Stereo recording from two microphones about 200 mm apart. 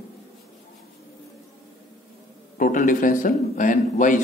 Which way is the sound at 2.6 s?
40° left (ahead or behind).